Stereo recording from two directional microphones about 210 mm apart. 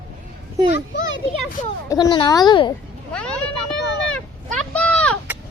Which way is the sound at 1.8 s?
20° left (ahead or behind).